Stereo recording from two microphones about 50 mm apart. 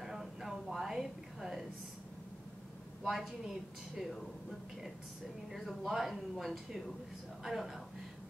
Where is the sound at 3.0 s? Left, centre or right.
Centre.